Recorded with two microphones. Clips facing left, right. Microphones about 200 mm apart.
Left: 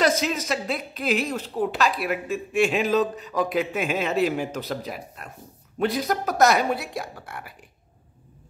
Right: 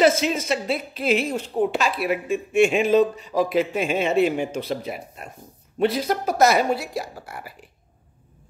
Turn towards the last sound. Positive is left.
turn(degrees=0)  # may be behind; listen again after turning